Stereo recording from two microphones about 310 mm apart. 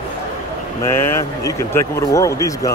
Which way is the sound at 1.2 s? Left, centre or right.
Centre.